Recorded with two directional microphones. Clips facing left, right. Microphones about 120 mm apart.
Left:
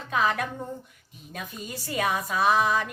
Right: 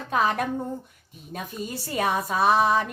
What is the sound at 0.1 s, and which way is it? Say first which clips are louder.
Speech: right 2 dB; 40° right (ahead or behind).